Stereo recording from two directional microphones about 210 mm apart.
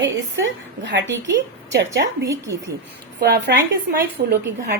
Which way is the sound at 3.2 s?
50° right (ahead or behind).